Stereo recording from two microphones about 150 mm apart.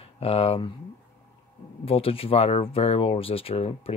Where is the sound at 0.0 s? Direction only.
40° left (ahead or behind).